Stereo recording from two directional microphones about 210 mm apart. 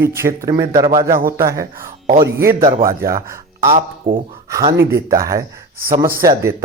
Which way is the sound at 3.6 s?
35° right (ahead or behind).